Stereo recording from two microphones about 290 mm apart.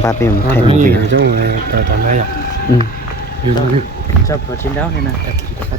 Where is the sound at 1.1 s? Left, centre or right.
Right.